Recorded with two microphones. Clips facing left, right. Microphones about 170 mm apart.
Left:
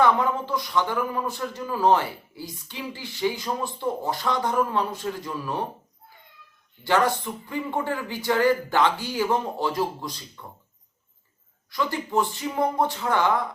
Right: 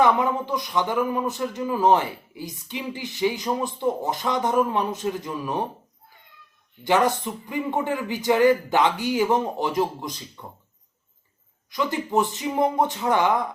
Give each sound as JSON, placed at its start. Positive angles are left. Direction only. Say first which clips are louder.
{"t": 0.0, "sound": "a man's voice", "louder": "right 1 dB", "side_deg": -15}
{"t": 6.8, "sound": "a man's voice", "louder": "right 2 dB", "side_deg": -20}
{"t": 11.7, "sound": "a man's voice", "louder": "right 2 dB", "side_deg": -20}